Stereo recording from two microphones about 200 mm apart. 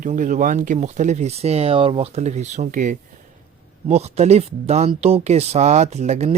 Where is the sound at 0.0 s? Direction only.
40° right (ahead or behind).